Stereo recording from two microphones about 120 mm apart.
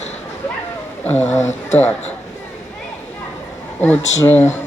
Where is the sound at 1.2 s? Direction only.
70° left (ahead or behind).